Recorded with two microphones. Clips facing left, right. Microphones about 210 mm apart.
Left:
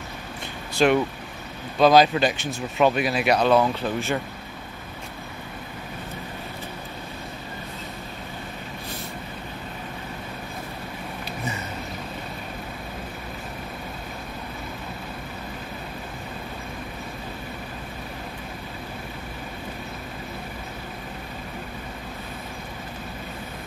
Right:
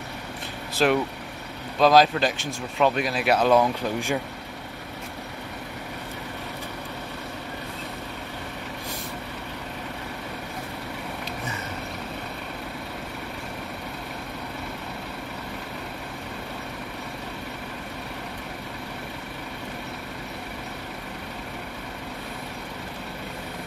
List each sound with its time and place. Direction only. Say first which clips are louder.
0.8 s speech: left 2 dB; centre (ahead or behind)